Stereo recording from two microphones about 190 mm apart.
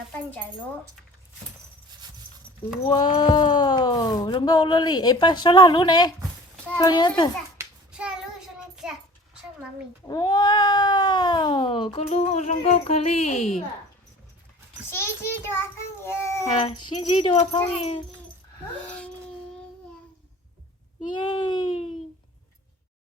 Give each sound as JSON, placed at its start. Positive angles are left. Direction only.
{"t": 0.1, "sound": "speech", "side_deg": 10}
{"t": 2.8, "sound": "speech", "side_deg": 25}
{"t": 7.6, "sound": "child singing", "side_deg": -5}
{"t": 10.1, "sound": "speech", "side_deg": 20}
{"t": 14.8, "sound": "a sound", "side_deg": 15}
{"t": 15.5, "sound": "child singing", "side_deg": 15}
{"t": 16.5, "sound": "speech", "side_deg": 30}
{"t": 21.1, "sound": "speech", "side_deg": 25}